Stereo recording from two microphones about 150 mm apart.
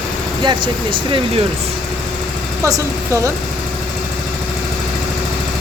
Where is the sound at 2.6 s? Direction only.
25° right (ahead or behind).